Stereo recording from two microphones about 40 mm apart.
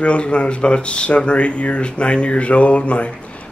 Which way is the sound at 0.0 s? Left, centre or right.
Left.